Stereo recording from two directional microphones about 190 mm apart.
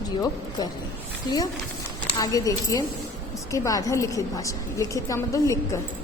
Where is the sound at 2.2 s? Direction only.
20° left (ahead or behind).